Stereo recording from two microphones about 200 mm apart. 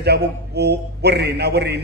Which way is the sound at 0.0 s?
55° right (ahead or behind).